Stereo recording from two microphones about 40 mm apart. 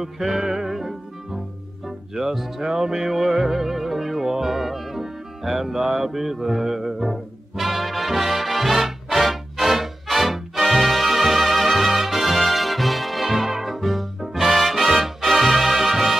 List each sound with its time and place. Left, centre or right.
0.0 s music: centre
2.1 s music: centre